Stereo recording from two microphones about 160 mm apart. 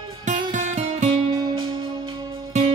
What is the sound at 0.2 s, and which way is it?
Music, 50° right (ahead or behind).